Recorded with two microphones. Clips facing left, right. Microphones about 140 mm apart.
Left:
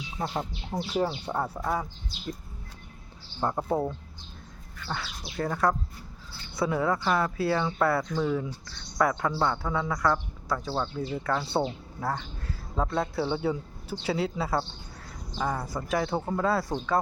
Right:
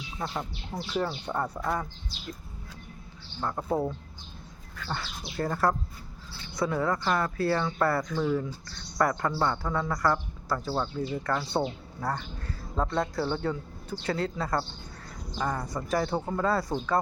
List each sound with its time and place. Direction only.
0.7 s speech: 15° left (ahead or behind)
3.4 s speech: 15° left (ahead or behind)
3.7 s speech: centre (ahead or behind)